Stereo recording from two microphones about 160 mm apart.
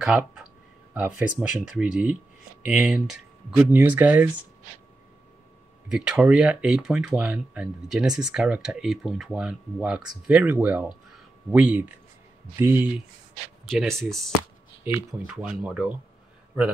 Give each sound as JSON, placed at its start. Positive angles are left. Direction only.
{"t": 0.0, "sound": "speech", "side_deg": -5}
{"t": 5.9, "sound": "speech", "side_deg": -5}
{"t": 13.7, "sound": "speech", "side_deg": 0}